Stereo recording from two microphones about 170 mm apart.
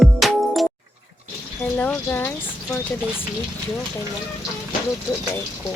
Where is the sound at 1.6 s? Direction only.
10° left (ahead or behind).